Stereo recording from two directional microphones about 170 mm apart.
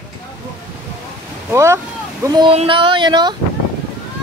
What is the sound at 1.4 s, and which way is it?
Speech, 15° right (ahead or behind).